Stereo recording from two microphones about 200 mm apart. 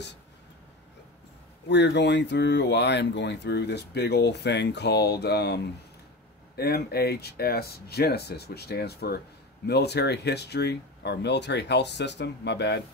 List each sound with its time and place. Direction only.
1.7 s speech: 60° left (ahead or behind)